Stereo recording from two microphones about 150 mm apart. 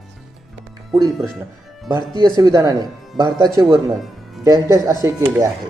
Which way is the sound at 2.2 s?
25° right (ahead or behind).